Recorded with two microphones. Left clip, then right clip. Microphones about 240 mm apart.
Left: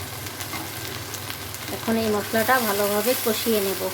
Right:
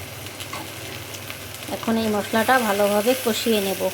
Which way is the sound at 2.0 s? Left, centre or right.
Centre.